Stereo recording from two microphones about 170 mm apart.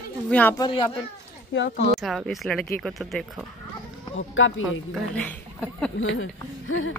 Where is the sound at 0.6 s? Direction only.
30° left (ahead or behind).